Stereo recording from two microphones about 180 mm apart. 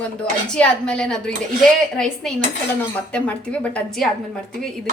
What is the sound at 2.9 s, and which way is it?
A woman's voice, 10° left (ahead or behind).